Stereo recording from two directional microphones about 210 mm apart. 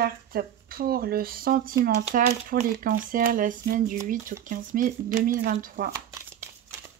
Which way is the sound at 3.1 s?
40° right (ahead or behind).